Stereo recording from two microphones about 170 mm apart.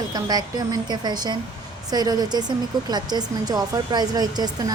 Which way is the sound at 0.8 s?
25° right (ahead or behind).